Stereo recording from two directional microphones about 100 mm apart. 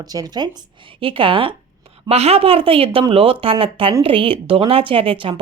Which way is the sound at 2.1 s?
90° right.